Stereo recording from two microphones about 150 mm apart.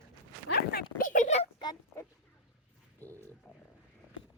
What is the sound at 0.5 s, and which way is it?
Speech, 80° left.